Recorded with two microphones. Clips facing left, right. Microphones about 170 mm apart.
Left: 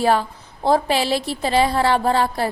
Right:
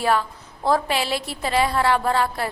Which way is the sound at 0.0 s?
30° left (ahead or behind).